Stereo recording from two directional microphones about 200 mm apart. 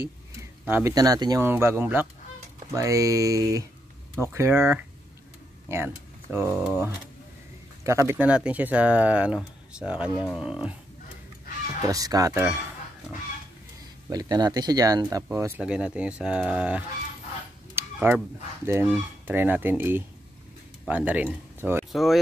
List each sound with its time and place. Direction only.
0.0 s speech: 10° right (ahead or behind)
6.5 s speech: centre (ahead or behind)
7.8 s speech: 15° right (ahead or behind)
11.8 s speech: 20° right (ahead or behind)
14.0 s speech: 20° right (ahead or behind)
17.7 s a sound: 10° right (ahead or behind)
18.7 s speech: 10° right (ahead or behind)
21.9 s speech: centre (ahead or behind)